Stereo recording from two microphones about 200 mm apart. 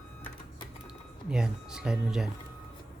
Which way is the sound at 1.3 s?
5° right (ahead or behind).